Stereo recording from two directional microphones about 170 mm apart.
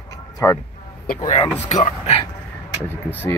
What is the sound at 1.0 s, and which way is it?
Speech, 45° left (ahead or behind).